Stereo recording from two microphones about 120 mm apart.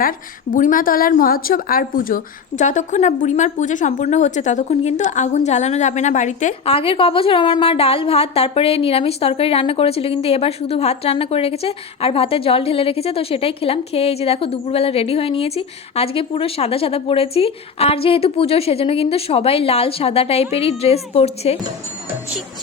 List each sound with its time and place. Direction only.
2.6 s speech: 90° left
6.7 s a woman's voice: 50° left (ahead or behind)